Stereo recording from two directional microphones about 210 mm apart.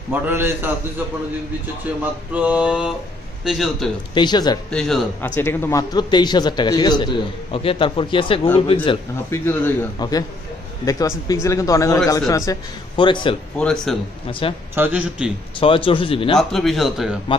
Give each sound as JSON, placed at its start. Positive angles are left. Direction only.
{"t": 0.1, "sound": "a man's voice", "side_deg": -10}
{"t": 2.3, "sound": "speech", "side_deg": -5}
{"t": 4.1, "sound": "a man's voice", "side_deg": 20}
{"t": 4.6, "sound": "a man's voice", "side_deg": 5}
{"t": 9.3, "sound": "a man's voice", "side_deg": 10}
{"t": 13.6, "sound": "speech", "side_deg": 5}
{"t": 14.4, "sound": "a man's voice", "side_deg": 25}
{"t": 14.8, "sound": "a man's voice", "side_deg": -5}
{"t": 15.6, "sound": "a man's voice", "side_deg": 25}
{"t": 16.3, "sound": "speech", "side_deg": 0}